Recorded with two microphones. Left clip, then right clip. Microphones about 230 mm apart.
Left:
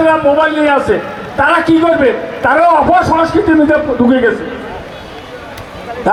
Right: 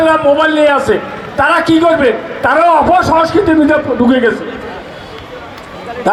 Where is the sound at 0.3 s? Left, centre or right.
Right.